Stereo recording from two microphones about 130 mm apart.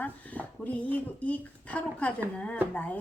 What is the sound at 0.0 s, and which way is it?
Speech, 10° left (ahead or behind).